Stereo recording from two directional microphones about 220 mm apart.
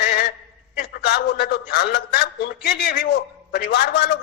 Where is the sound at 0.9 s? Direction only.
45° left (ahead or behind).